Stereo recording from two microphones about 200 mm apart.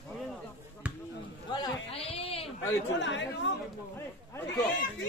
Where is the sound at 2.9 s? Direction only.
65° left (ahead or behind).